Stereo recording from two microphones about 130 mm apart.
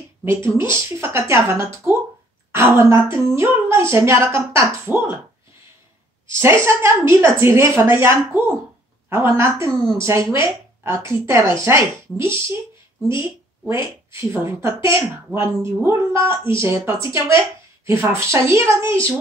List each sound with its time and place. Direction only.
0.2 s a woman's voice: 20° right (ahead or behind)
6.2 s a woman's voice: 20° right (ahead or behind)
14.3 s a woman's voice: 20° right (ahead or behind)